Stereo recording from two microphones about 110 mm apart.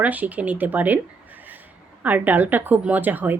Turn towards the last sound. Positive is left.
turn(degrees=-15)  # may be behind; listen again after turning